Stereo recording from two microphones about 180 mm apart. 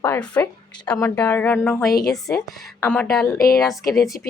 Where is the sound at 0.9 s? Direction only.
15° left (ahead or behind).